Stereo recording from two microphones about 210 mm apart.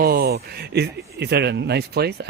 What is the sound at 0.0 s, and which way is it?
Speech, 45° right (ahead or behind).